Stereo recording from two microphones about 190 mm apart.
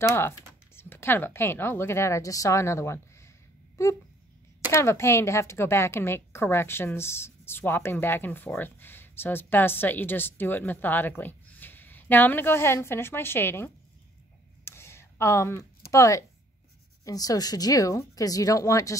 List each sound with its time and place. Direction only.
0.0 s a woman's voice: 10° left (ahead or behind)
4.7 s a woman's voice: 15° left (ahead or behind)
14.6 s a sound: 15° left (ahead or behind)
15.9 s a woman's voice: 15° left (ahead or behind)